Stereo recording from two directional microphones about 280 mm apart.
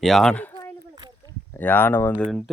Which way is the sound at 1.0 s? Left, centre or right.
Centre.